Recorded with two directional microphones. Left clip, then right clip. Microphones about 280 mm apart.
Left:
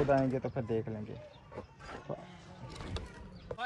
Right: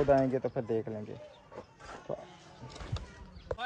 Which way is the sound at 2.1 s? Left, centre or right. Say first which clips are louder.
Right 4 dB; right.